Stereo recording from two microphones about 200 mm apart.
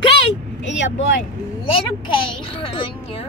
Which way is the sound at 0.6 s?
65° left (ahead or behind).